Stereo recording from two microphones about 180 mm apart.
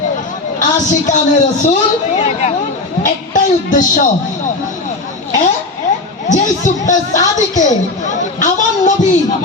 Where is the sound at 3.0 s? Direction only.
45° left (ahead or behind).